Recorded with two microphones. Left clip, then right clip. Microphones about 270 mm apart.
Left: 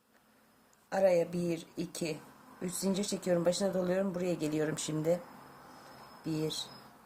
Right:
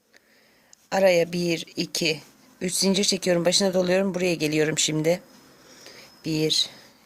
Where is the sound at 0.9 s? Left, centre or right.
Right.